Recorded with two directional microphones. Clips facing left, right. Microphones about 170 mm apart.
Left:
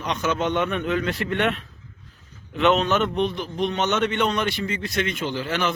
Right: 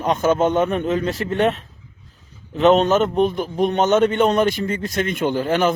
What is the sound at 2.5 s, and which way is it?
A man's voice, 40° right (ahead or behind).